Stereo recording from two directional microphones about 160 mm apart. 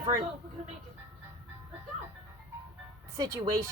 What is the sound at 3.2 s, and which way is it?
Speech, 25° right (ahead or behind).